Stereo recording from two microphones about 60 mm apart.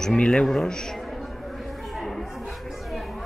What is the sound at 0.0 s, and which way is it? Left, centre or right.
Speech, centre.